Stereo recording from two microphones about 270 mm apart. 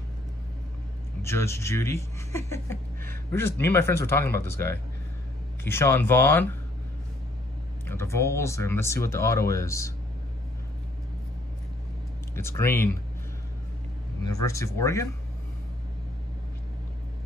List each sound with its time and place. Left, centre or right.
1.2 s speech: centre
7.8 s speech: centre
12.4 s speech: centre
14.2 s speech: centre